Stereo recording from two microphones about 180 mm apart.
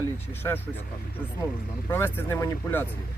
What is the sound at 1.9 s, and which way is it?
Speech, 10° left (ahead or behind).